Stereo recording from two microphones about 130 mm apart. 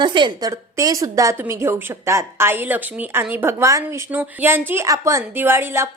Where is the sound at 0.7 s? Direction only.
25° right (ahead or behind).